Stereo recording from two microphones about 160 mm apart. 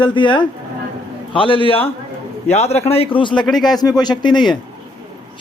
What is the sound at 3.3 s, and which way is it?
Speech, 5° left (ahead or behind).